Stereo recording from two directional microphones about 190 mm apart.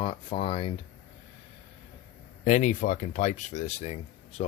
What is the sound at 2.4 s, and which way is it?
Speech, 40° left (ahead or behind).